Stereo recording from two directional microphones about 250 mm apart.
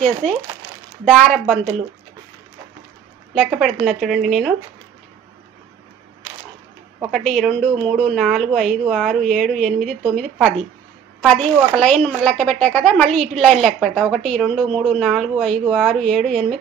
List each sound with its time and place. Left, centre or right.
0.0 s speech: centre
3.3 s speech: centre
7.0 s speech: centre
11.2 s speech: centre